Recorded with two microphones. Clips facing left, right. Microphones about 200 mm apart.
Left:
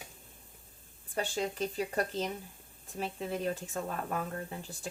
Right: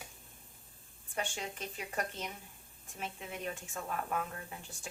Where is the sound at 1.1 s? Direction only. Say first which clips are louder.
Left 7 dB; 35° left (ahead or behind).